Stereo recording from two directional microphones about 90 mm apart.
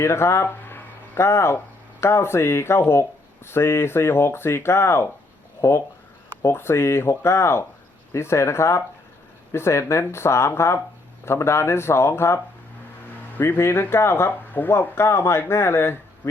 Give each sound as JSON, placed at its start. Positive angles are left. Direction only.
{"t": 0.0, "sound": "speech", "side_deg": 30}
{"t": 13.4, "sound": "speech", "side_deg": 25}